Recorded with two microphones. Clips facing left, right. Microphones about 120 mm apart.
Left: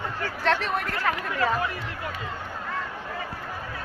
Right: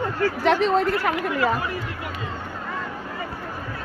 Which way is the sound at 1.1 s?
5° right (ahead or behind).